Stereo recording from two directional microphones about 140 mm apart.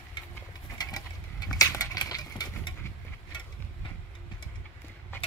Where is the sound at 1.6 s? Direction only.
25° left (ahead or behind).